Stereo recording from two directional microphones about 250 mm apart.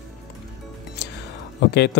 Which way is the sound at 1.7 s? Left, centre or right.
Left.